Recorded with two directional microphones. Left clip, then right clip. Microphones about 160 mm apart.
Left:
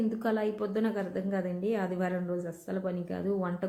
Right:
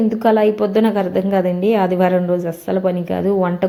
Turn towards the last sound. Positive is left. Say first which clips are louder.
# right 16 dB
turn(degrees=-20)  # may be behind; listen again after turning